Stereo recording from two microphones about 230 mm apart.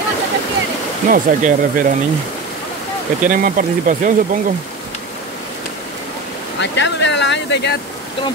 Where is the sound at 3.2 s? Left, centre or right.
Right.